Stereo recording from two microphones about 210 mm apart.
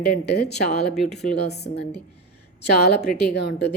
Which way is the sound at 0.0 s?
50° left (ahead or behind).